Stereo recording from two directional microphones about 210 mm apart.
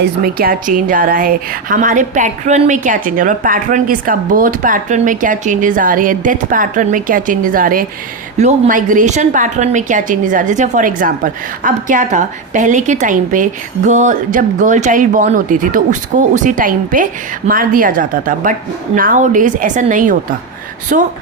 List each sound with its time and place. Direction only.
0.0 s a woman's voice: 45° right (ahead or behind)